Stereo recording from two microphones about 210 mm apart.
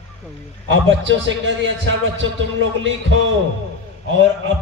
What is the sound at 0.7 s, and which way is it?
Speech, 60° right (ahead or behind).